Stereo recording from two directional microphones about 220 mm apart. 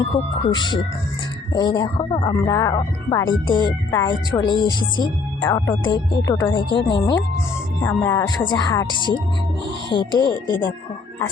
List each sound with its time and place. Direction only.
0.5 s speech: 20° left (ahead or behind)
9.9 s speech: 20° left (ahead or behind)